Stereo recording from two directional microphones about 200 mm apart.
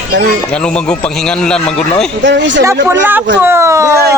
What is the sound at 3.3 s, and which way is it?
Speech, 10° right (ahead or behind).